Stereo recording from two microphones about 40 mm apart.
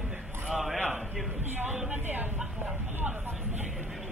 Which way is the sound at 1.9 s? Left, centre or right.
Right.